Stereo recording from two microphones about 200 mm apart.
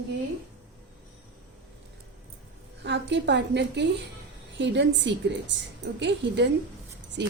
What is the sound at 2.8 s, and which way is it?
A woman's voice, 60° right (ahead or behind).